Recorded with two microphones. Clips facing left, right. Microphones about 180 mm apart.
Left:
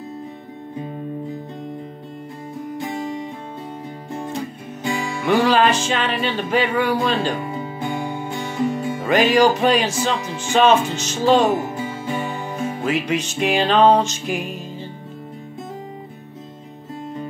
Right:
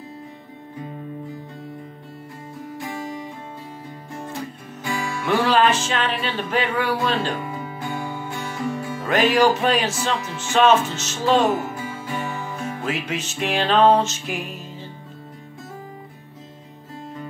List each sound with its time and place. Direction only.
2.8 s music: 20° left (ahead or behind)
4.8 s music: 25° left (ahead or behind)
5.3 s music: centre (ahead or behind)
7.3 s music: 25° left (ahead or behind)
9.0 s music: centre (ahead or behind)
11.5 s music: 20° left (ahead or behind)
12.8 s music: centre (ahead or behind)